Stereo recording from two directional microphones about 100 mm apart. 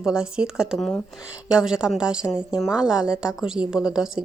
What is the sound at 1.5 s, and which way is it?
A woman's voice, 5° right (ahead or behind).